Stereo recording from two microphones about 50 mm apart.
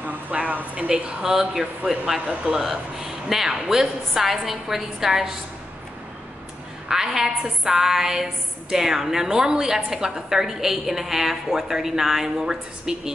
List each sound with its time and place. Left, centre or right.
0.0 s speech: right
0.8 s a woman's voice: centre
6.9 s a woman's voice: centre